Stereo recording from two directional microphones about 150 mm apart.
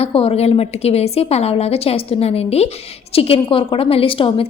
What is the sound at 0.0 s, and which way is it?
A woman's voice, 40° left (ahead or behind).